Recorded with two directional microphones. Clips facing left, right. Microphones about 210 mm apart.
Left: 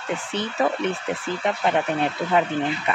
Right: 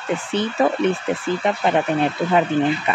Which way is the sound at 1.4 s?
25° right (ahead or behind).